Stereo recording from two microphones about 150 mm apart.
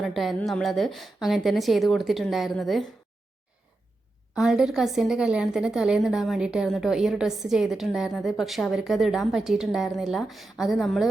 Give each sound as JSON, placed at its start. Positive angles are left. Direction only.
{"t": 0.0, "sound": "a woman's voice", "side_deg": 0}
{"t": 4.4, "sound": "a woman's voice", "side_deg": -5}